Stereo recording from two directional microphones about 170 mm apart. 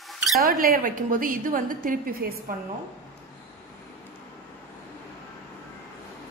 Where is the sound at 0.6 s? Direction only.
60° right (ahead or behind).